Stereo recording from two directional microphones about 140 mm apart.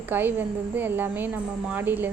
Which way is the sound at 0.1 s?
15° right (ahead or behind).